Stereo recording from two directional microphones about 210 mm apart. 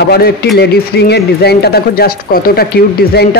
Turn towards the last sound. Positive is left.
turn(degrees=50)  # may be behind; listen again after turning